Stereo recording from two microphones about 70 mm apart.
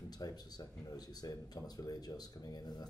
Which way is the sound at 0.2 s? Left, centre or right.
Left.